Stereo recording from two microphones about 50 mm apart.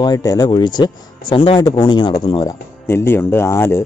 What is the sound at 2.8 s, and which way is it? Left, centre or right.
Speech, left.